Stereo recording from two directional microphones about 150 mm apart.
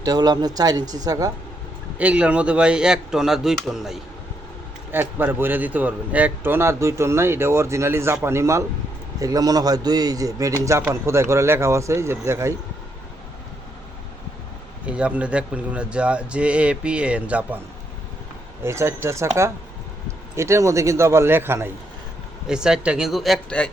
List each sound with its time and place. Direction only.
0.0 s a man's voice: 25° right (ahead or behind)
2.0 s a man's voice: 10° right (ahead or behind)
4.9 s a man's voice: 15° right (ahead or behind)
14.8 s a man's voice: 10° right (ahead or behind)
18.6 s a man's voice: 20° right (ahead or behind)
22.4 s a man's voice: 5° right (ahead or behind)